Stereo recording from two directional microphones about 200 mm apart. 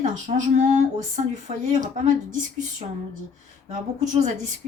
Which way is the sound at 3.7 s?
35° right (ahead or behind).